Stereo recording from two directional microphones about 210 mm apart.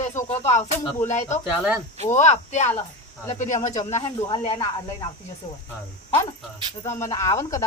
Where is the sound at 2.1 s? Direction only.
35° left (ahead or behind).